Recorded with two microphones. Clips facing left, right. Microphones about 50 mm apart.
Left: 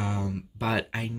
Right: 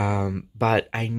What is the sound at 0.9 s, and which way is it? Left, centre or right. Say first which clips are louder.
Speech: right 4 dB; right.